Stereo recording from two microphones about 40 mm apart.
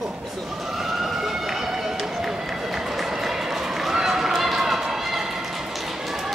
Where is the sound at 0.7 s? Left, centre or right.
Centre.